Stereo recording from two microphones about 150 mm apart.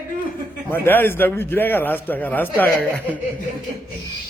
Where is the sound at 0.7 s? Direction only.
15° left (ahead or behind).